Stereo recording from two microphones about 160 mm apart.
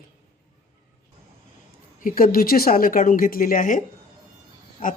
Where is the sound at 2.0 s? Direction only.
60° left (ahead or behind).